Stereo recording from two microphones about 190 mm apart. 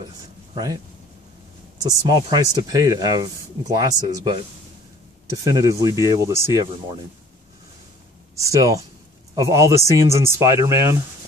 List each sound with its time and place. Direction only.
1.8 s speech: 20° right (ahead or behind)
5.4 s speech: 20° right (ahead or behind)
8.4 s speech: 15° right (ahead or behind)